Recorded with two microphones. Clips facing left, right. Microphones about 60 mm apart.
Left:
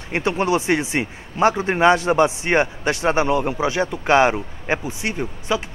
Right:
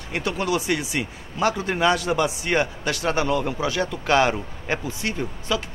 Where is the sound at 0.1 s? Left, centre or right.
Left.